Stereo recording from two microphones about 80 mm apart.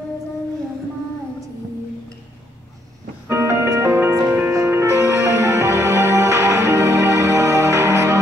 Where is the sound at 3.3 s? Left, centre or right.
Right.